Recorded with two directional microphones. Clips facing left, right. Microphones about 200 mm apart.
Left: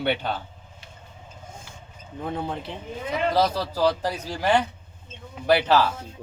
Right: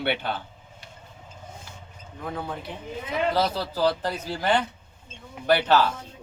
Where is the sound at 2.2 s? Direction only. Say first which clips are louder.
Left 3 dB; 25° left (ahead or behind).